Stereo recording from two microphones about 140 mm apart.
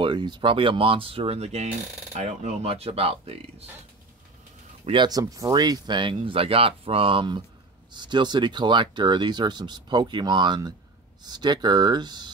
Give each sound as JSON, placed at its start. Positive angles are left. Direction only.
{"t": 0.0, "sound": "speech", "side_deg": -35}
{"t": 4.8, "sound": "speech", "side_deg": -35}